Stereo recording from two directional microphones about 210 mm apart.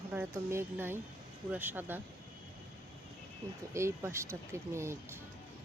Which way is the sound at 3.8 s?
15° right (ahead or behind).